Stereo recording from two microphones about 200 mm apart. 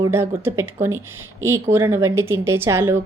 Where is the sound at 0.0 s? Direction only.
10° right (ahead or behind).